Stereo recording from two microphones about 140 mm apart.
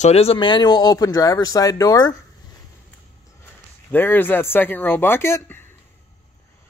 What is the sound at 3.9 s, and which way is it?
Speech, 15° left (ahead or behind).